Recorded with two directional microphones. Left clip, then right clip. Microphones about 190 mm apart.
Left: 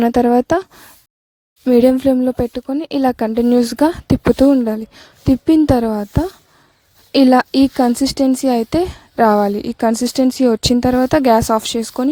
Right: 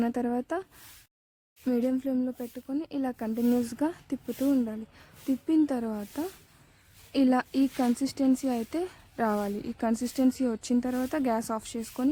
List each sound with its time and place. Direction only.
0.0 s speech: 40° left (ahead or behind)
1.7 s speech: 40° left (ahead or behind)